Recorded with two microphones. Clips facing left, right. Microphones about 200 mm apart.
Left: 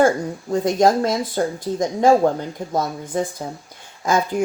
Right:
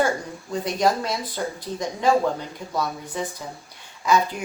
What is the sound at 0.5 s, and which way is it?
Speech, 45° left (ahead or behind).